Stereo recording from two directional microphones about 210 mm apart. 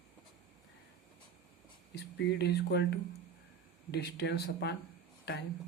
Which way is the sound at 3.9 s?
50° left (ahead or behind).